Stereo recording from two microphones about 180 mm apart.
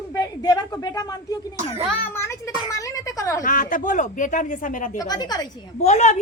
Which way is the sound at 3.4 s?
50° left (ahead or behind).